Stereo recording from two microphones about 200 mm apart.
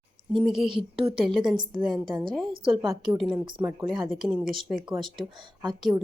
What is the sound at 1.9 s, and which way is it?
Speech, 20° right (ahead or behind).